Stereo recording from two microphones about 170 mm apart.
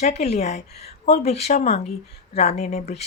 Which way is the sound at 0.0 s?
40° left (ahead or behind).